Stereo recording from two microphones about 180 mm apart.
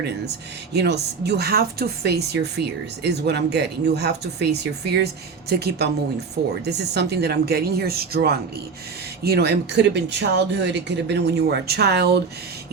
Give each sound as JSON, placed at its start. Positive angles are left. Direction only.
{"t": 0.7, "sound": "speech", "side_deg": -65}